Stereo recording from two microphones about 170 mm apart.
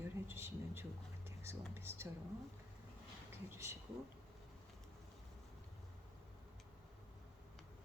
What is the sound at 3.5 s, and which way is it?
Speech, 15° right (ahead or behind).